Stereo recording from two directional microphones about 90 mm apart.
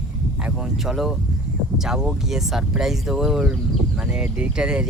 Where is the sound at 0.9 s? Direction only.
5° right (ahead or behind).